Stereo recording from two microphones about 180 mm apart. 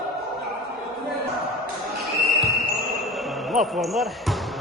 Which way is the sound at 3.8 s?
Centre (ahead or behind).